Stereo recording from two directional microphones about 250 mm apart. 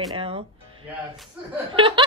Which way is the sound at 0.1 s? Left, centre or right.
Right.